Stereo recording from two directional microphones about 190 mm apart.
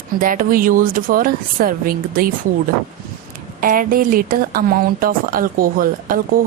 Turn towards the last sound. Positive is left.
turn(degrees=-50)  # may be behind; listen again after turning